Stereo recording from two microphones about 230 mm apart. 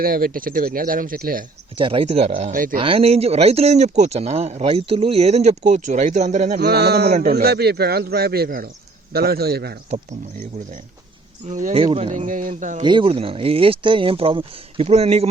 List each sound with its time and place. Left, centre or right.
0.0 s speech: right
1.8 s speech: right
2.7 s speech: right
6.6 s speech: right
9.9 s speech: right
12.8 s speech: right